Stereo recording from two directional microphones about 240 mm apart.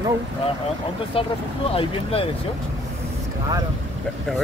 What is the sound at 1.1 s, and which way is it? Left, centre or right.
Speech, left.